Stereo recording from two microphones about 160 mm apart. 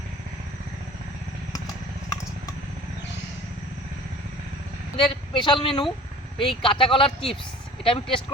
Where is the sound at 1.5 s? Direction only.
20° left (ahead or behind).